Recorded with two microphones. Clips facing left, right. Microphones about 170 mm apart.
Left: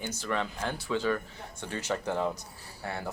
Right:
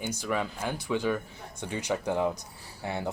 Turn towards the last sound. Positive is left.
turn(degrees=-20)  # may be behind; listen again after turning